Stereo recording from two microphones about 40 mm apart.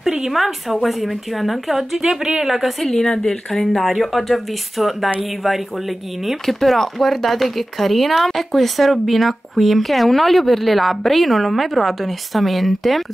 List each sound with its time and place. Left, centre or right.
0.3 s a woman's voice: centre
2.0 s a woman's voice: centre
2.4 s a woman's voice: centre
2.9 s a woman's voice: centre
6.4 s a woman's voice: centre